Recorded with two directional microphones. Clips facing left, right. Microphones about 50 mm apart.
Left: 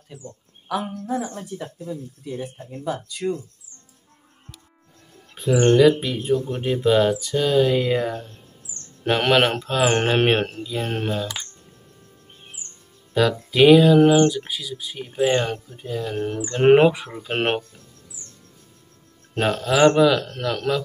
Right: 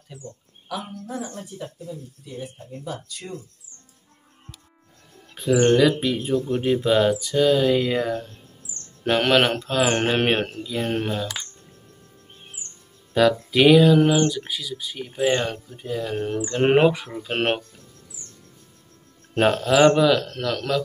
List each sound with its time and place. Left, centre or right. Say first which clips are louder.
0.7 s a woman's voice: left 5 dB; left
2.4 s speech: left 4 dB; left
5.3 s speech: even; centre
13.1 s speech: right 2 dB; centre
19.3 s speech: right 2 dB; centre